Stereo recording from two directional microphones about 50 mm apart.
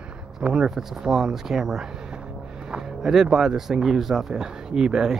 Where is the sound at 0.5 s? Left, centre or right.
Centre.